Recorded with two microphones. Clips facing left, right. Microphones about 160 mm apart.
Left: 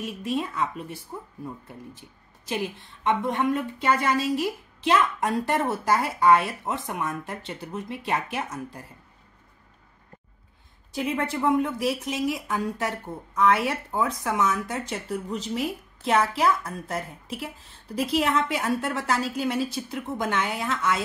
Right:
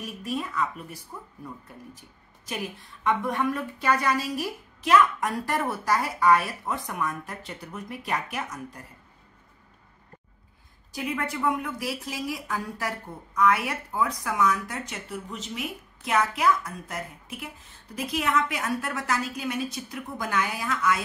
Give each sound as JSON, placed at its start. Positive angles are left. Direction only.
{"t": 0.0, "sound": "speech", "side_deg": 25}
{"t": 10.9, "sound": "speech", "side_deg": 25}
{"t": 15.0, "sound": "speech", "side_deg": 35}